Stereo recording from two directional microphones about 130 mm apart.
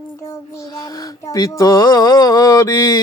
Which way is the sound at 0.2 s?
25° left (ahead or behind).